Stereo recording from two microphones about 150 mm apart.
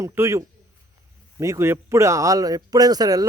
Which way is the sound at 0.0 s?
20° right (ahead or behind).